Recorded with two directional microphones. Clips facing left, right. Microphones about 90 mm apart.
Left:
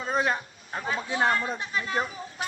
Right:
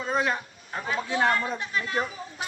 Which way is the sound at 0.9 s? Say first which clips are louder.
Right 1 dB; 25° left (ahead or behind).